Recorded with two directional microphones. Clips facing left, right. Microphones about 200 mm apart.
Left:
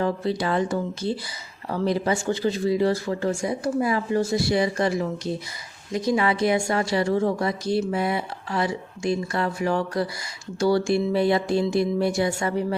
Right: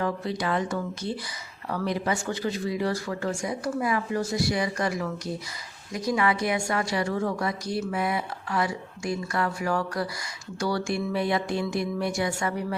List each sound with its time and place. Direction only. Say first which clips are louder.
0.0 s a woman's voice: left 4 dB; 30° left (ahead or behind)